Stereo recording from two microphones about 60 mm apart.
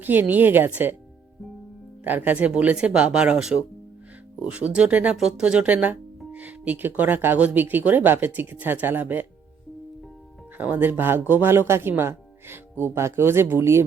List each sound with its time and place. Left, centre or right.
0.0 s speech: right
2.0 s speech: right
10.6 s speech: right